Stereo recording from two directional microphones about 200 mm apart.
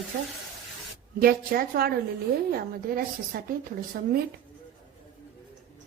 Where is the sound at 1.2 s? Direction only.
45° right (ahead or behind).